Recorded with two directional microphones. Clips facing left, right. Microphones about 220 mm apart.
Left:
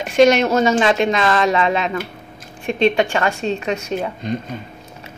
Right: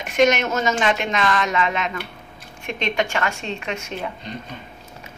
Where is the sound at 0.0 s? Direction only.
30° left (ahead or behind).